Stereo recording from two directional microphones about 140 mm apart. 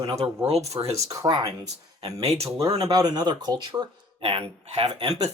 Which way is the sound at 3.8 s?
40° right (ahead or behind).